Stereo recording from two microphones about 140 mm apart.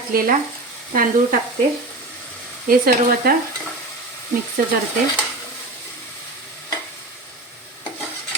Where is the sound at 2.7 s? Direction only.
90° right.